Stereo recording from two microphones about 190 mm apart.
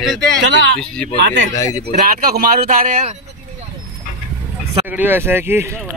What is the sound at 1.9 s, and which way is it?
Speech, 50° right (ahead or behind).